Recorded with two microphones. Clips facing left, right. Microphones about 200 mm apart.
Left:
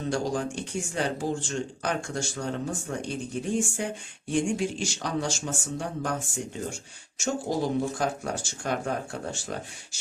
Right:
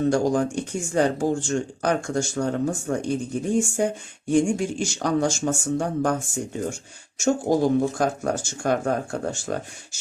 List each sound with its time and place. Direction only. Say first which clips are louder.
0.1 s speech: right 7 dB; 45° right (ahead or behind)